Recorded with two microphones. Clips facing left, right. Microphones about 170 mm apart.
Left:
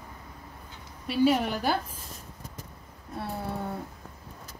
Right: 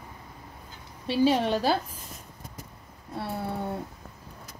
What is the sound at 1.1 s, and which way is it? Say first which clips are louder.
Speech: right 1 dB; 30° right (ahead or behind).